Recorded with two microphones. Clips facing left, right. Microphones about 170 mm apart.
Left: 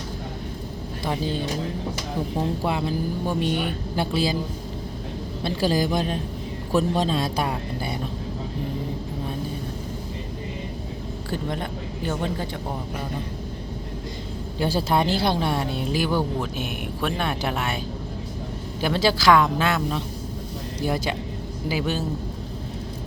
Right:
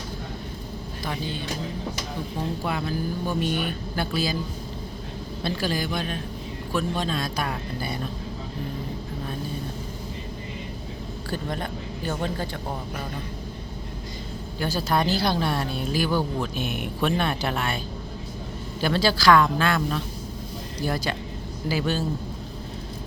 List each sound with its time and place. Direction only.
2.6 s speech: 25° left (ahead or behind)
5.5 s speech: 35° left (ahead or behind)
11.3 s speech: 20° left (ahead or behind)
14.6 s speech: 25° left (ahead or behind)
16.7 s speech: 5° left (ahead or behind)
18.8 s speech: 15° left (ahead or behind)